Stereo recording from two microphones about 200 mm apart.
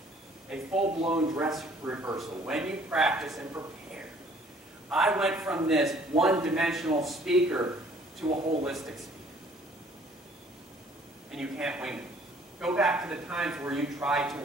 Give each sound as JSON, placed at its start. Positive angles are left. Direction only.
{"t": 0.7, "sound": "speech", "side_deg": -30}
{"t": 1.2, "sound": "a man's voice", "side_deg": -15}
{"t": 1.5, "sound": "a man's voice", "side_deg": -5}
{"t": 4.8, "sound": "a man's voice", "side_deg": -5}
{"t": 8.3, "sound": "speech", "side_deg": -30}
{"t": 8.6, "sound": "a man's voice", "side_deg": 0}
{"t": 11.3, "sound": "a man's voice", "side_deg": -5}